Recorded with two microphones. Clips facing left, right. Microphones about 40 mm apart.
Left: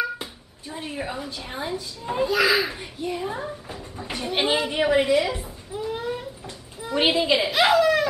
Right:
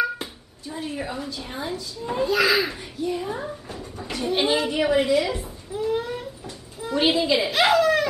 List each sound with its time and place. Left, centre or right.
0.0 s a sound: centre
0.7 s a child's voice: centre
5.8 s baby cry: centre
7.0 s a woman's voice: centre